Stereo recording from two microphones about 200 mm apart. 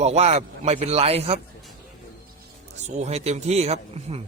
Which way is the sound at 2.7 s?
35° right (ahead or behind).